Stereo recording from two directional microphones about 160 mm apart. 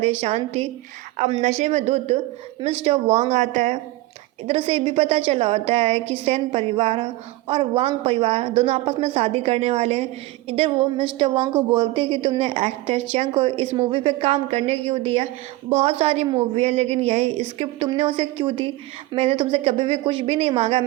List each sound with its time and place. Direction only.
0.2 s a woman's voice: 40° right (ahead or behind)
4.4 s a woman's voice: 35° right (ahead or behind)